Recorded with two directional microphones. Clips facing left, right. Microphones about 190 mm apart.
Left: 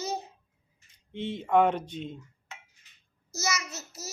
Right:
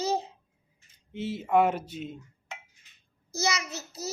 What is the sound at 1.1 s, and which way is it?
Speech, 5° right (ahead or behind).